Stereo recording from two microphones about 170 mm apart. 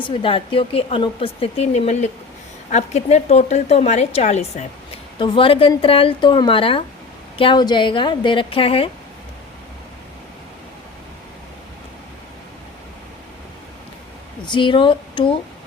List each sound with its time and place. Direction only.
0.0 s a woman's voice: 30° left (ahead or behind)
14.4 s a woman's voice: 25° left (ahead or behind)